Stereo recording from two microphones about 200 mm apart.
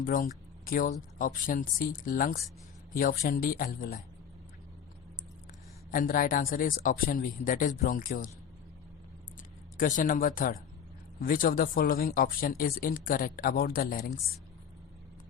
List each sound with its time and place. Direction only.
0.0 s speech: 45° left (ahead or behind)
5.9 s speech: 45° left (ahead or behind)
9.7 s speech: 40° left (ahead or behind)